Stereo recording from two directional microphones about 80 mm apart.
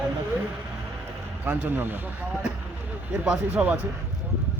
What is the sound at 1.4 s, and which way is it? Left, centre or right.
Speech, right.